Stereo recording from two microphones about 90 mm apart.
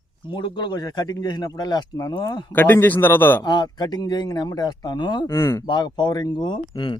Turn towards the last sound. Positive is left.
turn(degrees=65)  # may be behind; listen again after turning